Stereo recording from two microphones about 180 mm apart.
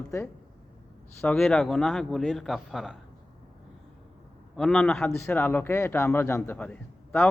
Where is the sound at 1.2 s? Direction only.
Centre (ahead or behind).